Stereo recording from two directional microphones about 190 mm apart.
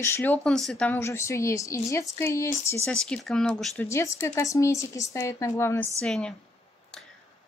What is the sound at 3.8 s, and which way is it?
A woman's voice, 15° left (ahead or behind).